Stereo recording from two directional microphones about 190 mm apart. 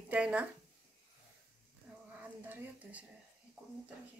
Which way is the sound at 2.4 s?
10° right (ahead or behind).